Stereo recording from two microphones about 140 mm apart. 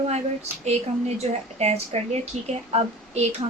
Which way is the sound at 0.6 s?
50° right (ahead or behind).